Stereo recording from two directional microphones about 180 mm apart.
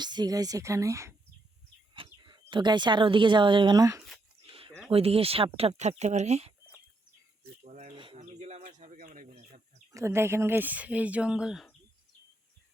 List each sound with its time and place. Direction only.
0.0 s speech: 25° right (ahead or behind)
2.2 s speech: 25° right (ahead or behind)
4.9 s speech: 30° right (ahead or behind)
7.6 s a sound: 40° right (ahead or behind)
7.9 s bird: 30° right (ahead or behind)
9.9 s speech: 15° right (ahead or behind)